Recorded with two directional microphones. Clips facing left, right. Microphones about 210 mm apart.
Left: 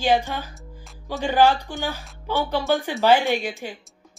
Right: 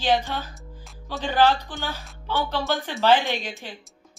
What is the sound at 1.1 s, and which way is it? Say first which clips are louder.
Speech: left 2 dB; 10° left (ahead or behind).